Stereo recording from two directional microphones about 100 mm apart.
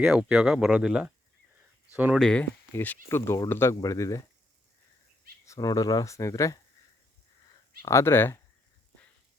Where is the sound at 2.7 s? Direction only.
20° left (ahead or behind).